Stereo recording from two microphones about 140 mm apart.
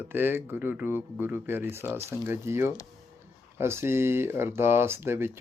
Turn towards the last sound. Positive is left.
turn(degrees=-15)  # may be behind; listen again after turning